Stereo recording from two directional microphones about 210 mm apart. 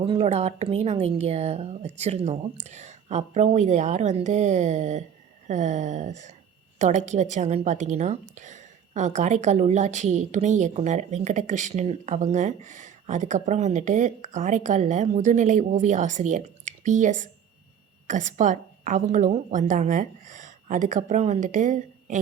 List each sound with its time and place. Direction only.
0.1 s a woman's voice: 30° right (ahead or behind)